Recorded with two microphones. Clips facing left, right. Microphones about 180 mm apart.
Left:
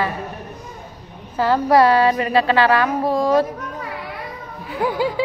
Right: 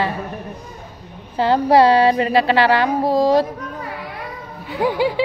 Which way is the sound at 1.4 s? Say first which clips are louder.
Right 1 dB; 30° right (ahead or behind).